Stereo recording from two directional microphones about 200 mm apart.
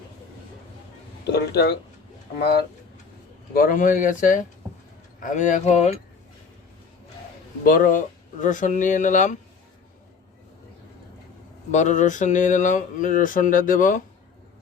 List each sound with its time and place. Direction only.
1.2 s speech: 55° left (ahead or behind); by 6.0 s 35° left (ahead or behind)
7.6 s speech: 45° left (ahead or behind)
11.7 s speech: 40° left (ahead or behind)